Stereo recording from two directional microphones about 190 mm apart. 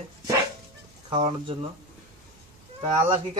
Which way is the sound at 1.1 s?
30° right (ahead or behind).